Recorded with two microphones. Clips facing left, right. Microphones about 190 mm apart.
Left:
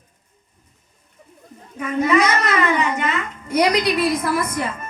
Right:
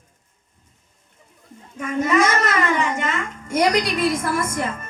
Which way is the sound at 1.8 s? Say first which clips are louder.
Left 1 dB; 45° right (ahead or behind).